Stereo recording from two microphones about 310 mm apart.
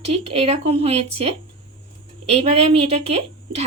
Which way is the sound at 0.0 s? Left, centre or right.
Centre.